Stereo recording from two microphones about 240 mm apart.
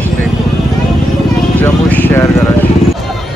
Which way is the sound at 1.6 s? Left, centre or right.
Centre.